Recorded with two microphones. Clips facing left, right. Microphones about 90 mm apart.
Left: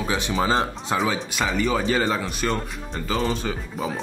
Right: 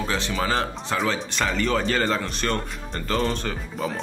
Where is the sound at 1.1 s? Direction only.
5° left (ahead or behind).